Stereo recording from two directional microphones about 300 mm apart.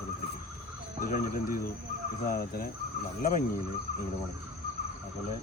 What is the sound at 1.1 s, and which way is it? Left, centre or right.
Speech, left.